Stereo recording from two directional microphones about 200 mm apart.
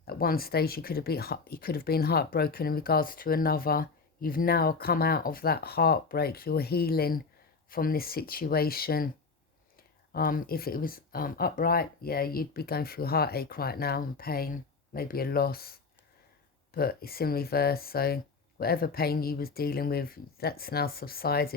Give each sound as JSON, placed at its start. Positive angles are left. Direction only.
{"t": 0.1, "sound": "speech", "side_deg": 50}
{"t": 10.1, "sound": "speech", "side_deg": 45}
{"t": 16.7, "sound": "speech", "side_deg": 50}